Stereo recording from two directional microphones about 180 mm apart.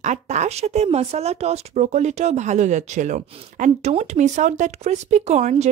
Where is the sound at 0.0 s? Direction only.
40° right (ahead or behind).